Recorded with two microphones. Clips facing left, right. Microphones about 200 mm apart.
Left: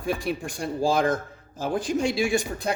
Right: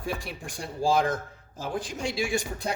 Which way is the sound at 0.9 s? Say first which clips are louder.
Left 1 dB; 50° left (ahead or behind).